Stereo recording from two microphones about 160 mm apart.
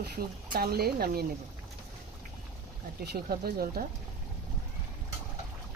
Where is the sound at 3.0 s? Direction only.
80° right.